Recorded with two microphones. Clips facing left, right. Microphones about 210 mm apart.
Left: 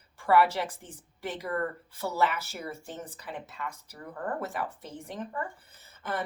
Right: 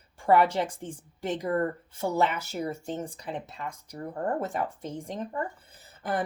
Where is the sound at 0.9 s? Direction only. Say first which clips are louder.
Right 6 dB; 25° right (ahead or behind).